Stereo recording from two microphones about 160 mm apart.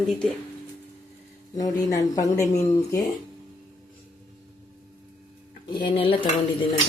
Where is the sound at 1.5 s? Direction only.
20° left (ahead or behind).